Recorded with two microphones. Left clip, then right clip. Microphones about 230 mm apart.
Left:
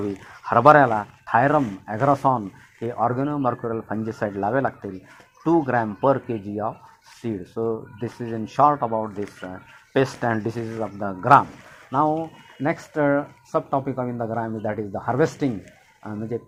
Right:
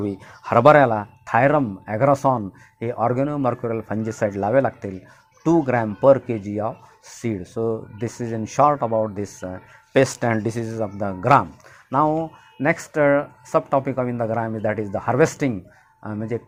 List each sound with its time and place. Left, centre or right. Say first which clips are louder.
0.0 s speech: right 1 dB; right